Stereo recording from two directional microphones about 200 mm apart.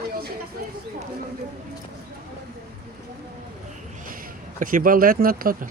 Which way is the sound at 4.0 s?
45° right (ahead or behind).